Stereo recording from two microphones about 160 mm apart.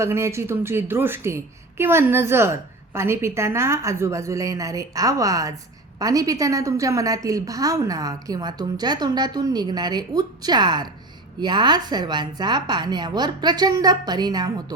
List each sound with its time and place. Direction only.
0.0 s a woman's voice: 15° right (ahead or behind)